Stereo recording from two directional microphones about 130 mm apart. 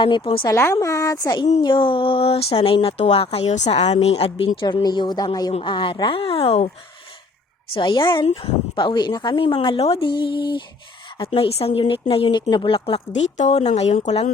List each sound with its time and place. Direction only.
0.0 s speech: 45° left (ahead or behind)
0.4 s speech: 20° left (ahead or behind); by 6.7 s 50° left (ahead or behind)
7.7 s speech: 40° left (ahead or behind)
13.3 s speech: 55° left (ahead or behind)